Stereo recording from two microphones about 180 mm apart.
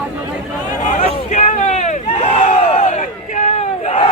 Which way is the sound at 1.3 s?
40° left (ahead or behind).